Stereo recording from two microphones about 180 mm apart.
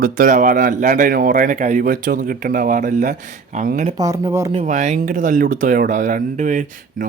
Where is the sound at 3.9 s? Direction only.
20° right (ahead or behind).